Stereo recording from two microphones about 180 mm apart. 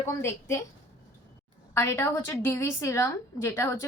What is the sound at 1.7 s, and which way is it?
A woman's voice, 15° left (ahead or behind).